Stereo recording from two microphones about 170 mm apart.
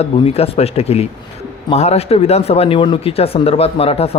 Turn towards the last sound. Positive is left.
turn(degrees=35)  # may be behind; listen again after turning